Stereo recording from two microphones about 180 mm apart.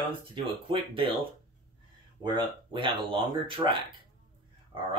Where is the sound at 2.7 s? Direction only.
30° right (ahead or behind).